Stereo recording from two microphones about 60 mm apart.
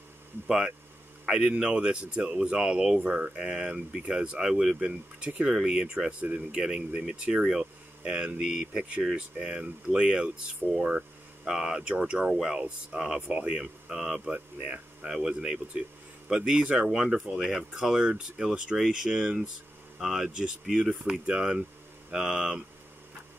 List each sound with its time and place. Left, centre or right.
0.5 s speech: centre
6.2 s speech: right
6.6 s speech: centre